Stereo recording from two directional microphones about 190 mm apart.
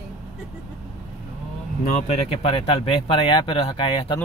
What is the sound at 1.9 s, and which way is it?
Speech, 30° left (ahead or behind).